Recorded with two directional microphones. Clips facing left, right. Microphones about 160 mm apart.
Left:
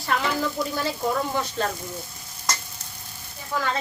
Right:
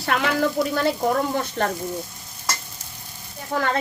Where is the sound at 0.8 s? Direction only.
55° right (ahead or behind).